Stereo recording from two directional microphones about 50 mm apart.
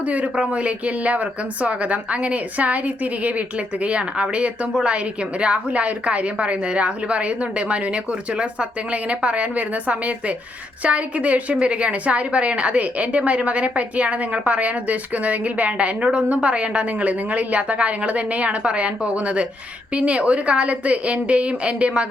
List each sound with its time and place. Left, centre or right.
0.0 s a woman's voice: right